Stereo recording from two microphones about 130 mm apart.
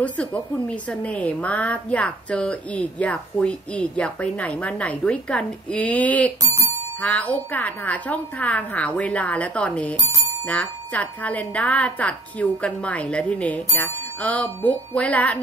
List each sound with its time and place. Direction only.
0.0 s a woman's voice: 10° left (ahead or behind)